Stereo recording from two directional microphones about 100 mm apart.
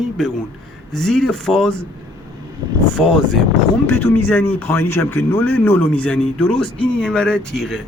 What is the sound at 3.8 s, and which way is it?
Speech, 20° left (ahead or behind).